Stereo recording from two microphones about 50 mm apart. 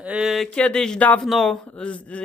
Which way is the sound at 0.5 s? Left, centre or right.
Left.